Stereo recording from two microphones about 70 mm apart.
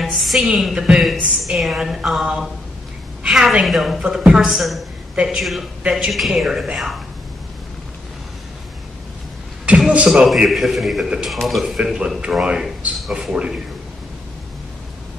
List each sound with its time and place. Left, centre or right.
0.0 s a woman's voice: centre
4.0 s a woman's voice: centre
5.1 s a man's voice: centre
9.7 s a man's voice: centre
10.0 s a man's voice: centre
11.8 s a woman's voice: centre